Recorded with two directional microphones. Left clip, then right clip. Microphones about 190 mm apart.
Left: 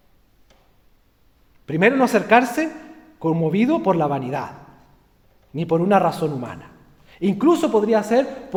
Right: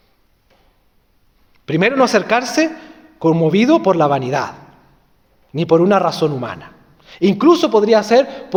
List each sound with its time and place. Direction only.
1.6 s a man's voice: 25° right (ahead or behind)
5.5 s a man's voice: 25° right (ahead or behind)